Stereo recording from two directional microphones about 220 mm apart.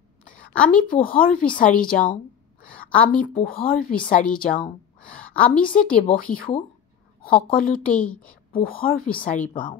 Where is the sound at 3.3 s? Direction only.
40° left (ahead or behind).